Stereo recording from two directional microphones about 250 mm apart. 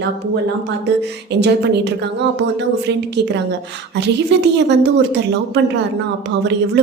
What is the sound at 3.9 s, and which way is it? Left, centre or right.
A woman's voice, right.